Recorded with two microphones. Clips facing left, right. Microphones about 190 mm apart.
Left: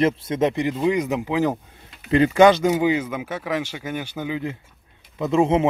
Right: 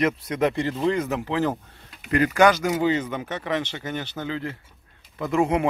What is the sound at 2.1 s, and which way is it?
Speech, 25° left (ahead or behind).